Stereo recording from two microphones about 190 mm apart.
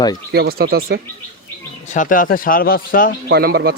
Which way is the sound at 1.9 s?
45° left (ahead or behind).